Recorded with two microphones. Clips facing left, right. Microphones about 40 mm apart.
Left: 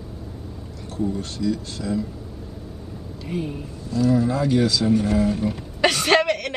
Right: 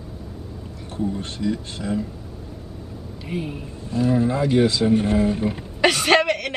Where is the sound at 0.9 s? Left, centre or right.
Right.